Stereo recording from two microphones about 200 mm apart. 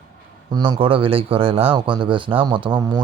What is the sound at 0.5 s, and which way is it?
Speech, 25° right (ahead or behind).